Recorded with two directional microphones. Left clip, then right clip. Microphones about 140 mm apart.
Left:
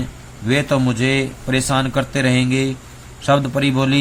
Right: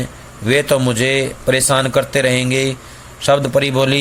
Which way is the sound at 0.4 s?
35° right (ahead or behind).